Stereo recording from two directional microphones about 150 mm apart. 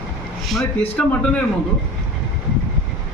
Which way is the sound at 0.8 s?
10° left (ahead or behind).